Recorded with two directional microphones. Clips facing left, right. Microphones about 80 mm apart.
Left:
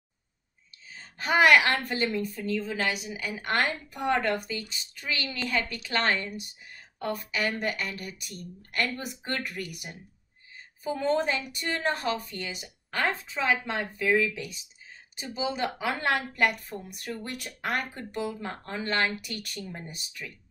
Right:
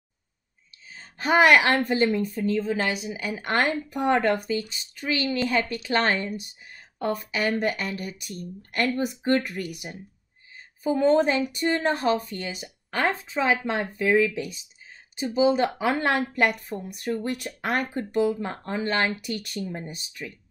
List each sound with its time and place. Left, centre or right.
1.1 s speech: right
7.0 s speech: right
7.3 s speech: right